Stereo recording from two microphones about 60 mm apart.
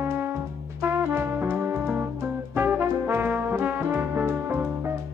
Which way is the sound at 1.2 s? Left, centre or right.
Right.